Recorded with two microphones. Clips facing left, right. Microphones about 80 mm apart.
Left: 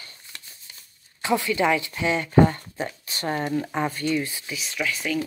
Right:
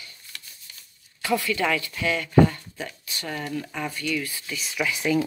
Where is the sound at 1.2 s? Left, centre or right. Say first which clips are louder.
Left 2 dB; left.